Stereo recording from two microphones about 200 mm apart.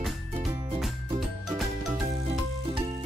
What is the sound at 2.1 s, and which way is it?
Music, 30° right (ahead or behind).